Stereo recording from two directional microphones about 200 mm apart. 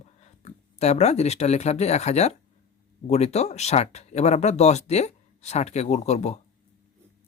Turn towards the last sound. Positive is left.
turn(degrees=35)  # may be behind; listen again after turning